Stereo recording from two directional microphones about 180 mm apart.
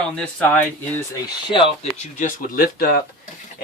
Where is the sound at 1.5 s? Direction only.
30° left (ahead or behind); by 3.0 s 55° left (ahead or behind).